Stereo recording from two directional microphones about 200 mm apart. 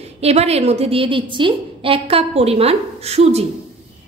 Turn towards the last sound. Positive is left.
turn(degrees=-30)  # may be behind; listen again after turning